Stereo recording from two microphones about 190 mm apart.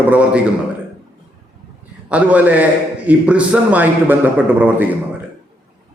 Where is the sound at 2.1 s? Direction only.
10° right (ahead or behind).